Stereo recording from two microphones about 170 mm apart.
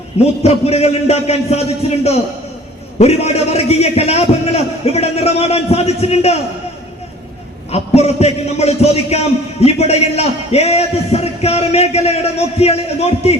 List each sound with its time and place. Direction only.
0.4 s a man's voice: 40° left (ahead or behind)
3.0 s a man's voice: 35° left (ahead or behind)
7.7 s a man's voice: 40° left (ahead or behind)